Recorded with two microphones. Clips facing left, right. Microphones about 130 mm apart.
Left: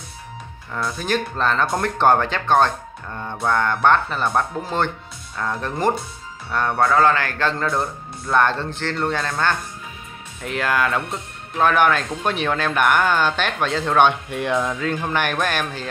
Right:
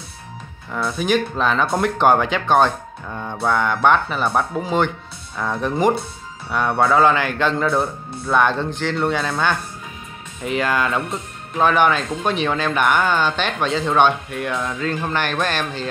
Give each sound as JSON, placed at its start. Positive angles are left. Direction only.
{"t": 0.7, "sound": "speech", "side_deg": -5}
{"t": 14.0, "sound": "speech", "side_deg": 20}